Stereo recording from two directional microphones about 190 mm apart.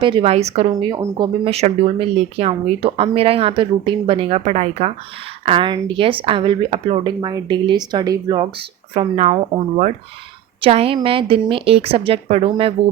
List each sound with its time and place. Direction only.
0.0 s speech: 30° right (ahead or behind)